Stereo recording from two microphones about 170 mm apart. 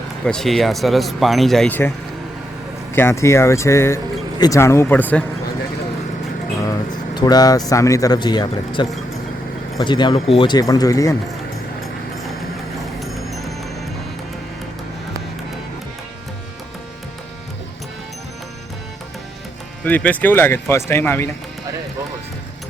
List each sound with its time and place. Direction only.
0.3 s speech: centre (ahead or behind)
2.9 s speech: 15° left (ahead or behind)
6.7 s speech: 25° left (ahead or behind)
19.8 s speech: 10° left (ahead or behind)